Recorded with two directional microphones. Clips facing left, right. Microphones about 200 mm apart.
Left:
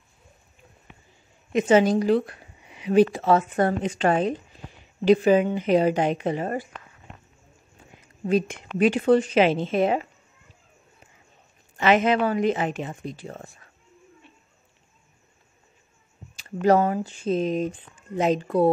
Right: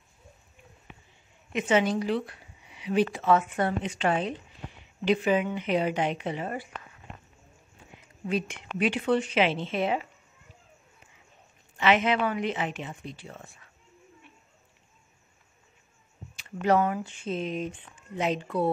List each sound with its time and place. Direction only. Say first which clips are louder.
1.5 s speech: left 6 dB; 40° left (ahead or behind)
8.3 s speech: left 7 dB; 40° left (ahead or behind)
11.7 s speech: left 4 dB; 45° left (ahead or behind)
16.3 s speech: left 5 dB; 40° left (ahead or behind)